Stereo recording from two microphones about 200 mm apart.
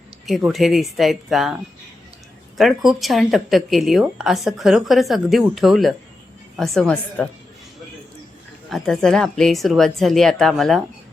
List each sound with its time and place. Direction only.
0.3 s speech: centre (ahead or behind)
2.6 s speech: centre (ahead or behind)
8.7 s speech: centre (ahead or behind)